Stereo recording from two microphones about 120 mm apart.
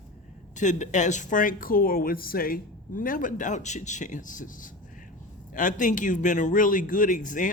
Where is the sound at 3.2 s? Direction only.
90° left.